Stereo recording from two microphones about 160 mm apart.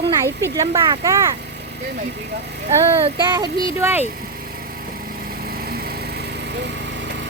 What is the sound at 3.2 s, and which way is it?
Speech, 25° right (ahead or behind).